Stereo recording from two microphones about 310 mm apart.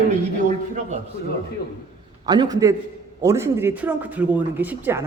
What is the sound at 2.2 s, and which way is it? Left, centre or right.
Speech, centre.